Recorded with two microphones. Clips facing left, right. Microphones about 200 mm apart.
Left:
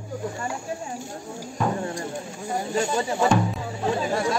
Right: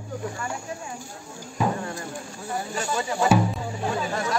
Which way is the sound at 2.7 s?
25° left (ahead or behind).